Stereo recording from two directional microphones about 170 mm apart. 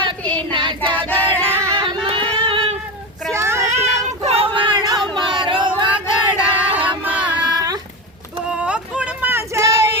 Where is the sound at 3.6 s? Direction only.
40° right (ahead or behind).